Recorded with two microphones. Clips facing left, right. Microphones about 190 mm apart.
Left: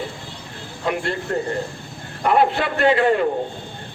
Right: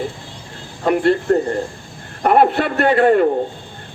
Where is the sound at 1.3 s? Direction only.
50° right (ahead or behind).